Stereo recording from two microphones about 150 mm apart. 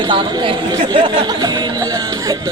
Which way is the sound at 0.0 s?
30° right (ahead or behind).